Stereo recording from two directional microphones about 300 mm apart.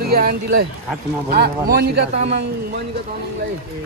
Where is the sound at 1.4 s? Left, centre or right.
Right.